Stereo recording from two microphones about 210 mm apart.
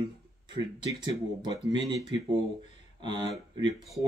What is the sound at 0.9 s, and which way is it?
Speech, 20° right (ahead or behind).